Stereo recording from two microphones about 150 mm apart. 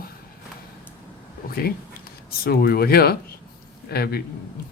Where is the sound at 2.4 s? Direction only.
90° left.